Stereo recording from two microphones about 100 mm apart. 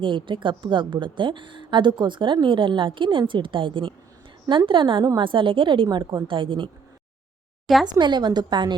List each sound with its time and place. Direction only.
0.0 s a woman's voice: 55° right (ahead or behind)
7.9 s a woman's voice: 45° right (ahead or behind)